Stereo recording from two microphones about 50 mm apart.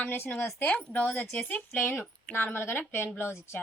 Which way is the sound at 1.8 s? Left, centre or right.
Left.